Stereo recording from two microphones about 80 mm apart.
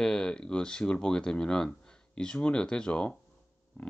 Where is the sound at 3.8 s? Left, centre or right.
Left.